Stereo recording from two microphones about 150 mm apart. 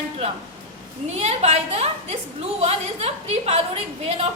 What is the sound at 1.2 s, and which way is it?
A woman's voice, 45° right (ahead or behind).